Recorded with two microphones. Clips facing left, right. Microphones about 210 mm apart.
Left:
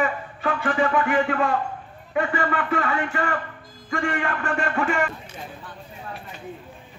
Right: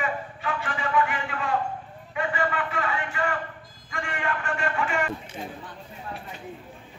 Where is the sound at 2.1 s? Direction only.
50° left (ahead or behind).